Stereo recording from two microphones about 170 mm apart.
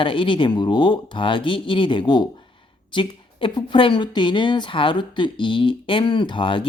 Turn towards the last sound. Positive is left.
turn(degrees=30)  # may be behind; listen again after turning